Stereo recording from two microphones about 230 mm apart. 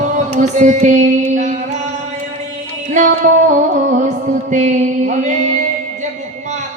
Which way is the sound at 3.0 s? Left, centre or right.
Right.